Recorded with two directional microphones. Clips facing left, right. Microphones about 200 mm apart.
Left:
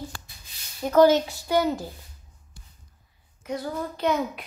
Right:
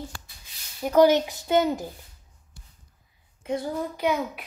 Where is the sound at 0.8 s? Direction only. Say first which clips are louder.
Left 1 dB; 15° right (ahead or behind).